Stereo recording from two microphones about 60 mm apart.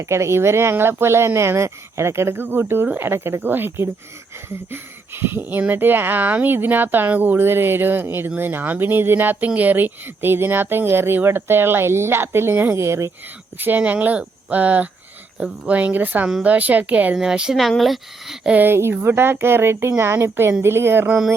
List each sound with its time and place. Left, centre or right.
0.0 s speech: right
12.7 s speech: right
13.6 s speech: right
17.2 s speech: centre
17.6 s speech: centre
18.5 s speech: right